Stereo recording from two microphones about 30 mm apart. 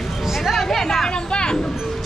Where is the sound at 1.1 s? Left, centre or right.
Left.